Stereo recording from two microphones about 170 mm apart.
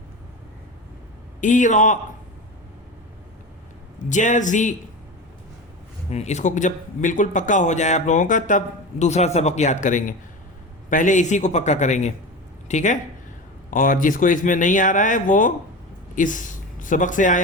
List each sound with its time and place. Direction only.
1.4 s speech: 45° left (ahead or behind)
4.1 s speech: 45° left (ahead or behind)
6.1 s speech: 40° left (ahead or behind)